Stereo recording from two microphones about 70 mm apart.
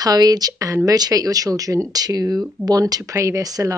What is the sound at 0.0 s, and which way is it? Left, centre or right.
Speech, right.